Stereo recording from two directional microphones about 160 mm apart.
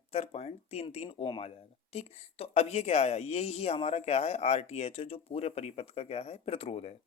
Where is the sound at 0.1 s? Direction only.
40° left (ahead or behind).